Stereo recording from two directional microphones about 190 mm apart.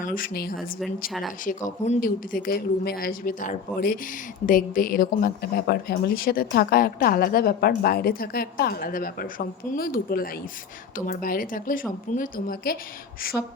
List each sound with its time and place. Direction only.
0.0 s speech: 45° left (ahead or behind)
1.5 s speech: 40° left (ahead or behind)